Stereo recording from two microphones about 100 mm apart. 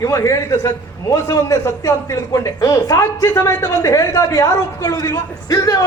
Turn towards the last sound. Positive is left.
turn(degrees=35)  # may be behind; listen again after turning